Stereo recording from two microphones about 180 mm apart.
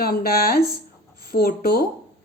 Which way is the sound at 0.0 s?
55° left (ahead or behind).